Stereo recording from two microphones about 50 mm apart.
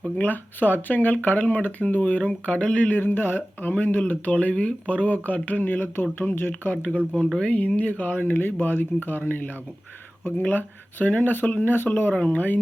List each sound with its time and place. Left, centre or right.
0.2 s speech: left
2.9 s speech: left
6.5 s speech: left
8.4 s speech: left